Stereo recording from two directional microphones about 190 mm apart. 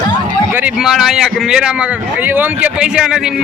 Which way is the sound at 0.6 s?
5° right (ahead or behind).